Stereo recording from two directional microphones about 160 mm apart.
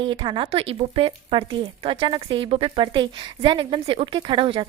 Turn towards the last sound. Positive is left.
turn(degrees=-30)  # may be behind; listen again after turning